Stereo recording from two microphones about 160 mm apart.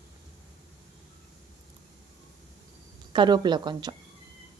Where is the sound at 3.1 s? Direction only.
30° right (ahead or behind).